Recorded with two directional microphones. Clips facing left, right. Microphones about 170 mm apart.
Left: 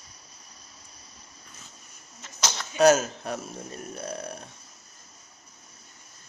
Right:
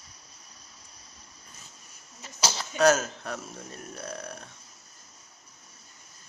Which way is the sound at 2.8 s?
15° left (ahead or behind).